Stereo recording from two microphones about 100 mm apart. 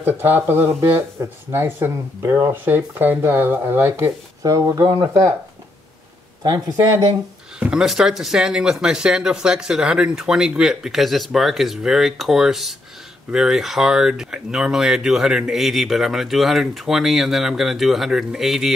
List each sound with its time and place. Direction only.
0.0 s speech: 20° right (ahead or behind)
4.4 s speech: 35° right (ahead or behind)
6.4 s speech: 45° right (ahead or behind)
7.5 s speech: 10° right (ahead or behind)